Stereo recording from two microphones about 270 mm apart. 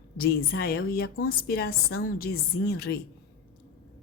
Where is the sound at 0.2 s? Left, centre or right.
Left.